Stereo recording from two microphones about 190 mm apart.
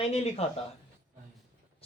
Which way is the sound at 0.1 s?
30° left (ahead or behind).